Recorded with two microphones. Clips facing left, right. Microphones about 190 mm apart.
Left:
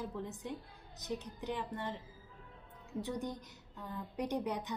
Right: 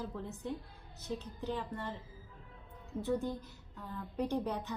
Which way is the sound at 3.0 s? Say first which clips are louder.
Right 7 dB; 15° left (ahead or behind).